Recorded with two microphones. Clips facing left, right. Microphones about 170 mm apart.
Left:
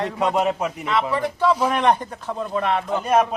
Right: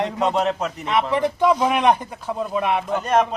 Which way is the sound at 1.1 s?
15° right (ahead or behind).